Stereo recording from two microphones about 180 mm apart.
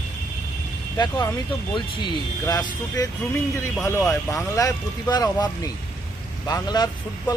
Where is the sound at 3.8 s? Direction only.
15° left (ahead or behind).